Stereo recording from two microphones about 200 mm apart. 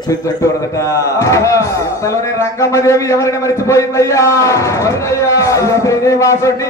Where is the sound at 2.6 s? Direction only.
15° left (ahead or behind).